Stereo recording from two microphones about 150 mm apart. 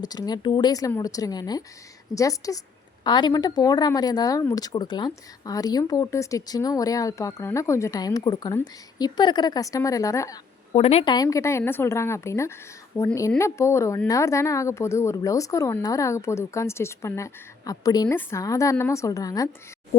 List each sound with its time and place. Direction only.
0.0 s a woman's voice: 25° left (ahead or behind)
10.8 s a woman's voice: 45° left (ahead or behind)
11.0 s a woman's voice: 25° left (ahead or behind)
12.9 s a woman's voice: centre (ahead or behind)
13.4 s a woman's voice: 20° left (ahead or behind)